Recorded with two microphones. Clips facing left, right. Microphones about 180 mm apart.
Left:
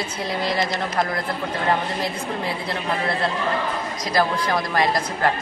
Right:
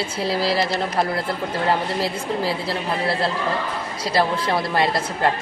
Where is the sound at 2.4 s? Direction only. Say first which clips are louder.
Right 2 dB; 30° right (ahead or behind).